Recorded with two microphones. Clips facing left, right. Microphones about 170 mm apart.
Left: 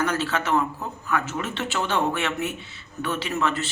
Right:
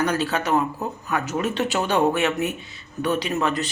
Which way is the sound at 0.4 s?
40° right (ahead or behind).